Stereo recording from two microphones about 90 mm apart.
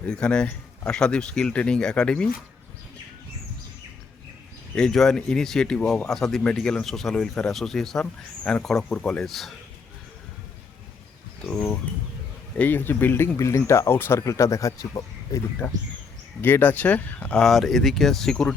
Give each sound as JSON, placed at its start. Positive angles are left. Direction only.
{"t": 0.0, "sound": "speech", "side_deg": 10}
{"t": 4.7, "sound": "speech", "side_deg": 5}
{"t": 12.5, "sound": "speech", "side_deg": 20}
{"t": 16.4, "sound": "speech", "side_deg": 20}